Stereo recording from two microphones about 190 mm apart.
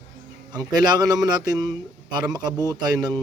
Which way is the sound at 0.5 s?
20° right (ahead or behind).